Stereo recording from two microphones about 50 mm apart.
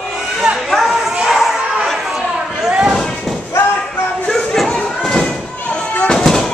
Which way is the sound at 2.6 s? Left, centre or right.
Centre.